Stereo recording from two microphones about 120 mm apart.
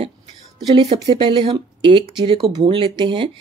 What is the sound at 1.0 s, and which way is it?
Speech, 50° right (ahead or behind).